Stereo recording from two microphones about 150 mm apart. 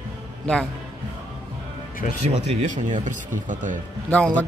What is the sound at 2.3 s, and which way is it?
Speech, 45° right (ahead or behind).